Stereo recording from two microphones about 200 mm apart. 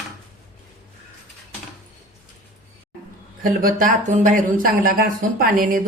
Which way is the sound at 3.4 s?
45° right (ahead or behind).